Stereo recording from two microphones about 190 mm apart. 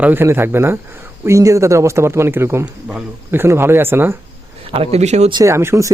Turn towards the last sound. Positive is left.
turn(degrees=-15)  # may be behind; listen again after turning